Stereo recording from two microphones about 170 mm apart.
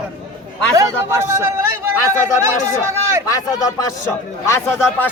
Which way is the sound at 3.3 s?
20° left (ahead or behind).